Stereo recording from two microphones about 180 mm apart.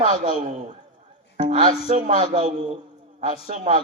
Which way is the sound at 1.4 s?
40° right (ahead or behind).